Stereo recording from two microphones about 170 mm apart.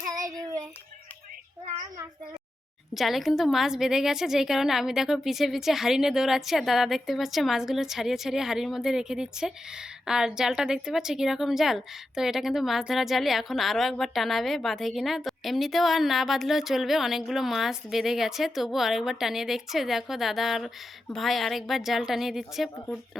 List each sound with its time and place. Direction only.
0.3 s child singing: 20° right (ahead or behind)
2.9 s a woman's voice: centre (ahead or behind)